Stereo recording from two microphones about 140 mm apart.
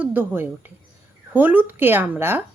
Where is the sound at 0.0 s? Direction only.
15° right (ahead or behind).